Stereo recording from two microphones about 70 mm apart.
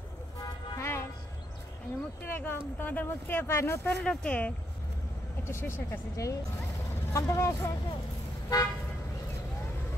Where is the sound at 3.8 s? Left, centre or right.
Centre.